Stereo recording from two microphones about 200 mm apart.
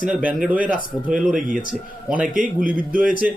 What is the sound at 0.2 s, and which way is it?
A man's voice, 5° right (ahead or behind).